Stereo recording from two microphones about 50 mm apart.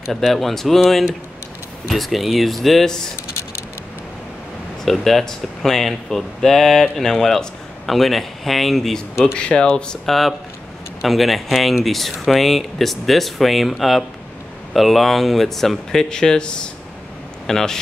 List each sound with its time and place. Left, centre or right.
0.1 s speech: centre
1.9 s speech: centre
4.8 s speech: centre
9.2 s speech: centre
10.0 s speech: centre